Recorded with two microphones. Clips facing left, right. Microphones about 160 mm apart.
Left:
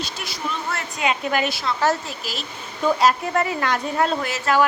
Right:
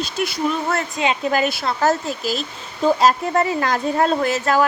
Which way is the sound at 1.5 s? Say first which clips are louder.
Right 2 dB; 45° right (ahead or behind).